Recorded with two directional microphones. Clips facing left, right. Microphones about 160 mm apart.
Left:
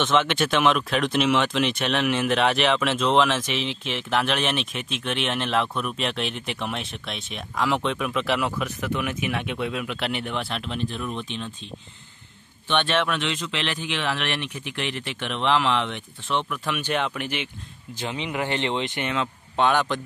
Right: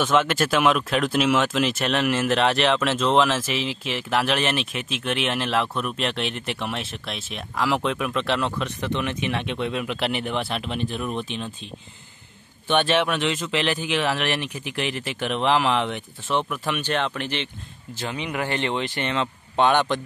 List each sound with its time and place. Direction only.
0.0 s speech: 5° right (ahead or behind)
12.7 s speech: 5° right (ahead or behind)
16.8 s speech: 10° left (ahead or behind)
17.9 s speech: 20° left (ahead or behind)
19.0 s a man's voice: centre (ahead or behind)